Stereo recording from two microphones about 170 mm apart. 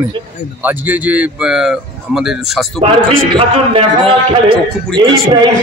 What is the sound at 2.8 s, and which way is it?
A man's voice, 35° right (ahead or behind).